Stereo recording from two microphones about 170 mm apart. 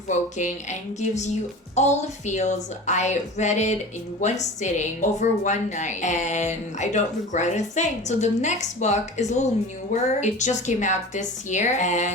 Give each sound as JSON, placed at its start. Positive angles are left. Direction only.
{"t": 0.1, "sound": "a woman's voice", "side_deg": 45}